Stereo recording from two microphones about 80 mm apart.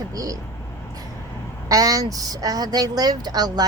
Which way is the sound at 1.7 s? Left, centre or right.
Right.